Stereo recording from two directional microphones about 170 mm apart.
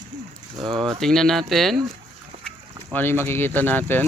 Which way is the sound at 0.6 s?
30° right (ahead or behind).